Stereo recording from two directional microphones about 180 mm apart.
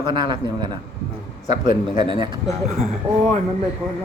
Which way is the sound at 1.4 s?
40° left (ahead or behind).